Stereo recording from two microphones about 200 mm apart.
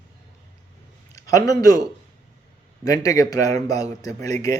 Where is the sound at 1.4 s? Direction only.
20° left (ahead or behind).